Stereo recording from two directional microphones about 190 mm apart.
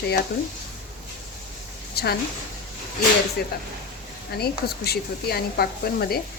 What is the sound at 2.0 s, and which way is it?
Speech, 55° left (ahead or behind).